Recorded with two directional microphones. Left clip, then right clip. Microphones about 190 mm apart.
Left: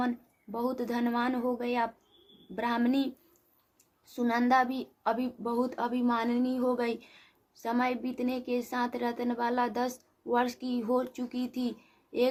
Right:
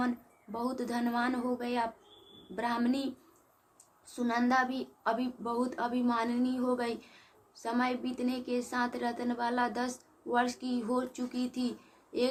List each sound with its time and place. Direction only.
0.5 s a woman's voice: 40° left (ahead or behind)
4.1 s a woman's voice: 45° left (ahead or behind)